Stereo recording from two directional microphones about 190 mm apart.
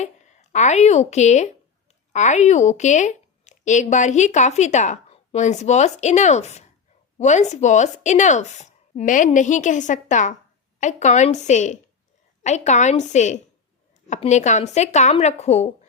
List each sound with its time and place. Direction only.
0.5 s speech: 40° left (ahead or behind)